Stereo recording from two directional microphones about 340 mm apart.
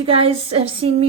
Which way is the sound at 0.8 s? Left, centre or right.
Right.